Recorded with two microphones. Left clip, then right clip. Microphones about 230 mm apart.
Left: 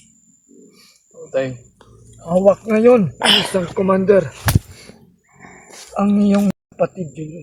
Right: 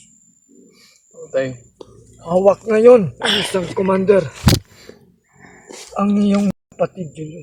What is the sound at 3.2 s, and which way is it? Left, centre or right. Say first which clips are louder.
Speech: left 4 dB; left.